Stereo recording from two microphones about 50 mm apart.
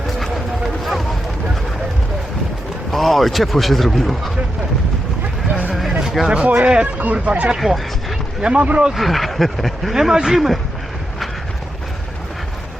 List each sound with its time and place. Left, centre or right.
2.9 s a man's voice: centre
6.0 s speech: centre
8.9 s speech: centre
9.9 s a man's voice: centre